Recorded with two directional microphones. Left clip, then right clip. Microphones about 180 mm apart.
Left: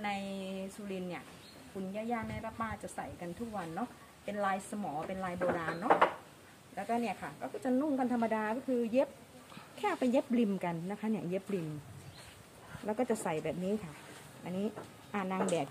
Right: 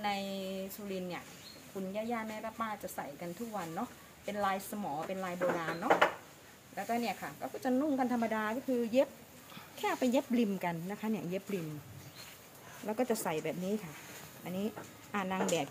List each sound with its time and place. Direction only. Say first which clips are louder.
0.0 s a sound: right 2 dB; 5° left (ahead or behind)
2.0 s speech: even; centre (ahead or behind); by 11.4 s 20° left (ahead or behind)
12.8 s speech: even; 25° left (ahead or behind)